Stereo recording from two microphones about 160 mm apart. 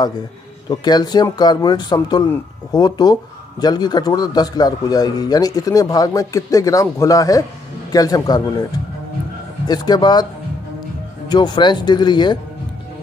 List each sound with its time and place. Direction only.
0.7 s a man's voice: 25° left (ahead or behind)
9.7 s a man's voice: 25° left (ahead or behind)
11.2 s a man's voice: 25° left (ahead or behind)